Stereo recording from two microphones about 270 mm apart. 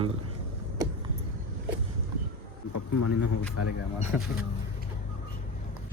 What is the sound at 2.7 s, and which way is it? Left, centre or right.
Speech, left.